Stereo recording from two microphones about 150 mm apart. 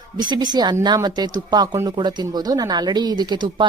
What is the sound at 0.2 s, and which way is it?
A woman's voice, 30° right (ahead or behind).